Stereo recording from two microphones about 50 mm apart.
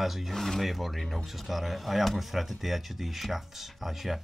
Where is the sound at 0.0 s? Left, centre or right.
Centre.